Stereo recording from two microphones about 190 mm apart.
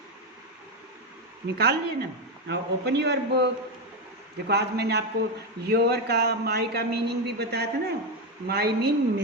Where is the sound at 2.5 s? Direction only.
60° right (ahead or behind).